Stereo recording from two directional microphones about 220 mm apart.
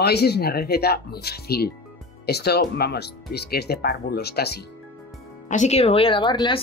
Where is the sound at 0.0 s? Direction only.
45° left (ahead or behind).